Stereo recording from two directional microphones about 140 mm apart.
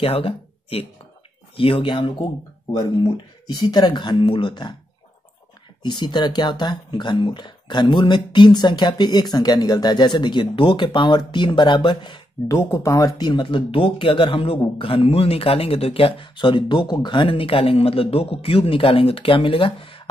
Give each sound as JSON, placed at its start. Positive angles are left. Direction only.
{"t": 0.0, "sound": "speech", "side_deg": 40}
{"t": 3.5, "sound": "speech", "side_deg": 30}
{"t": 5.9, "sound": "speech", "side_deg": 30}
{"t": 12.4, "sound": "speech", "side_deg": 20}